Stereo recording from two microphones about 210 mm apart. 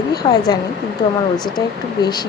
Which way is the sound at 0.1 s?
20° left (ahead or behind).